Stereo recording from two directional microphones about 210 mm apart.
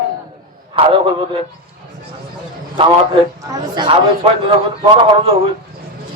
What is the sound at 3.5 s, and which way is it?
Speech, 20° right (ahead or behind).